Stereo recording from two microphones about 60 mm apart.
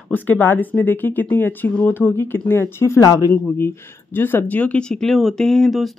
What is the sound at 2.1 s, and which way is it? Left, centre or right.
Speech, left.